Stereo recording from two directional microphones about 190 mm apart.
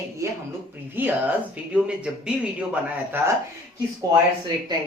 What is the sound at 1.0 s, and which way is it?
Speech, 10° right (ahead or behind).